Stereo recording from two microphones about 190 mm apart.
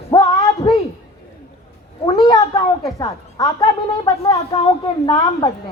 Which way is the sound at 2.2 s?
20° left (ahead or behind).